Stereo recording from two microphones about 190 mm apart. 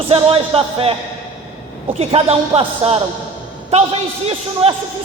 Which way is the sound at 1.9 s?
30° right (ahead or behind).